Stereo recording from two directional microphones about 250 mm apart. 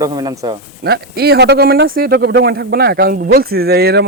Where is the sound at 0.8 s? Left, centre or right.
Right.